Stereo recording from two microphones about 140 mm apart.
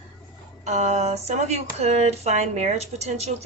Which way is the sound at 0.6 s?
55° right (ahead or behind).